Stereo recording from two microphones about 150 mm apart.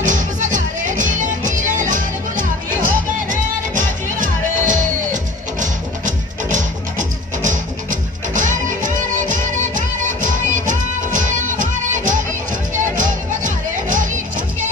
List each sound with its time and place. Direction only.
0.0 s music: 55° right (ahead or behind)